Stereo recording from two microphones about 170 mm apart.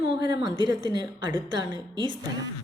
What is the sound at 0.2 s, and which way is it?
A woman's voice, 25° right (ahead or behind).